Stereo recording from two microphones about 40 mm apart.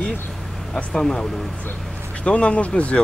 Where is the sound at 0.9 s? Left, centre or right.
Centre.